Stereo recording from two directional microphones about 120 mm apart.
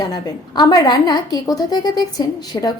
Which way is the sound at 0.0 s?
35° left (ahead or behind).